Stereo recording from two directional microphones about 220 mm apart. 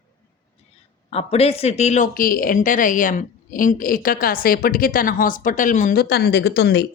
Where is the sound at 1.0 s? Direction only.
30° left (ahead or behind).